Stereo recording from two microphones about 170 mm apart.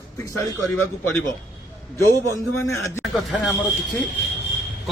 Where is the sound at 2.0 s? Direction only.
15° left (ahead or behind).